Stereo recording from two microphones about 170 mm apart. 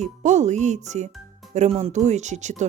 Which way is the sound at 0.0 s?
45° right (ahead or behind).